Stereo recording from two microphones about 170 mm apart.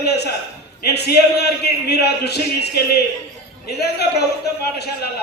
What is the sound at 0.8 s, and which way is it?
A man's voice, 75° left (ahead or behind).